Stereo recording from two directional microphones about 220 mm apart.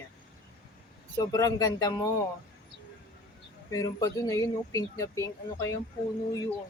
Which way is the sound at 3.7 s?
15° left (ahead or behind).